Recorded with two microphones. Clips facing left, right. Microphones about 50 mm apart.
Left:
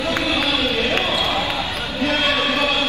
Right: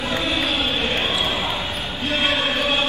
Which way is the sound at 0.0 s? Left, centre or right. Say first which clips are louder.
Left 2 dB; left.